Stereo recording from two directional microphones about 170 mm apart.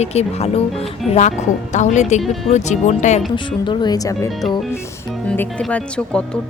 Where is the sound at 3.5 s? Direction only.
30° left (ahead or behind).